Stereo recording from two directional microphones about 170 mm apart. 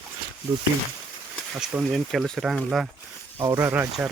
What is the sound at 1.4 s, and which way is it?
Speech, centre (ahead or behind).